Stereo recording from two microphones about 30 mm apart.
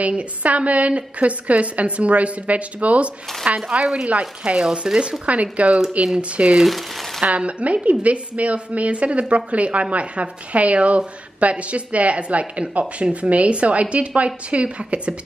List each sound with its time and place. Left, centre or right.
0.4 s speech: right
4.9 s speech: right
5.2 s speech: right
6.6 s speech: centre
7.2 s speech: right